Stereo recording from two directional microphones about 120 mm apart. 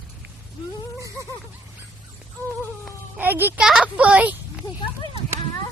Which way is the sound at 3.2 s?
15° right (ahead or behind).